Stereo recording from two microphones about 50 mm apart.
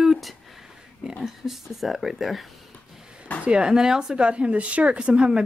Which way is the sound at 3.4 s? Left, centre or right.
Centre.